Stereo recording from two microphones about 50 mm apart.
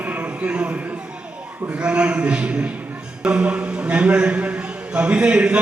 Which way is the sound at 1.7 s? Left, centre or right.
Right.